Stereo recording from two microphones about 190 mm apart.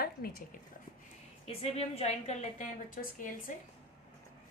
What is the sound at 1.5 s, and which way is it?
A woman's voice, 30° left (ahead or behind).